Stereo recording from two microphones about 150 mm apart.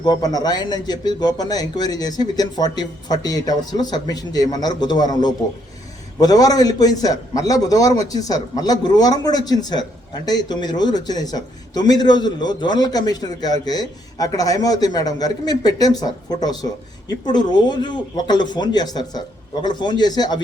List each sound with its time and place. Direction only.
0.0 s speech: 25° left (ahead or behind)